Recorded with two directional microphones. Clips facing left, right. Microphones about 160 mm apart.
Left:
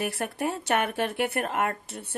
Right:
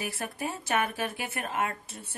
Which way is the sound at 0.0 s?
65° left (ahead or behind).